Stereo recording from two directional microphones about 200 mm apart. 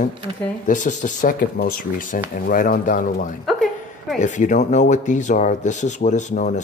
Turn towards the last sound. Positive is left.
turn(degrees=35)  # may be behind; listen again after turning